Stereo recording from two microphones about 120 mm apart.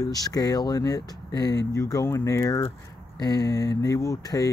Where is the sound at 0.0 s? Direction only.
30° left (ahead or behind).